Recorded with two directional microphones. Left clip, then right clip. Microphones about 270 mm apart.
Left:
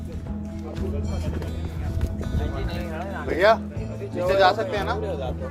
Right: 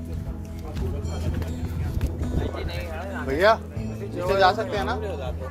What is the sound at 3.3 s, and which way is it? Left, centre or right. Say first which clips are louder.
Music: left 1 dB; centre.